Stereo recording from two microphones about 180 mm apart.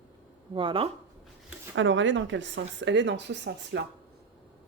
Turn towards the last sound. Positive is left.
turn(degrees=-75)  # may be behind; listen again after turning